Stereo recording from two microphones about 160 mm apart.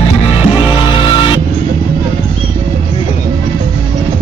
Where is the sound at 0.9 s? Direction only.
30° left (ahead or behind).